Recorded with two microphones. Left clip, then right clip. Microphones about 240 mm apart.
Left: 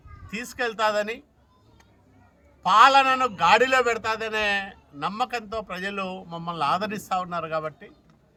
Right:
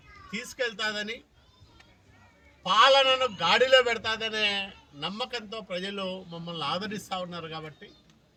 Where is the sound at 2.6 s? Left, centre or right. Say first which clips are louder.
Left 4 dB; left.